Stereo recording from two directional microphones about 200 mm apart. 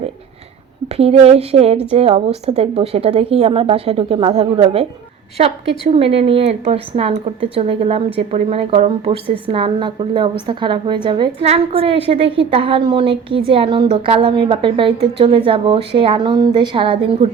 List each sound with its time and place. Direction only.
0.9 s a woman's voice: 30° right (ahead or behind)
5.9 s a woman's voice: 30° right (ahead or behind)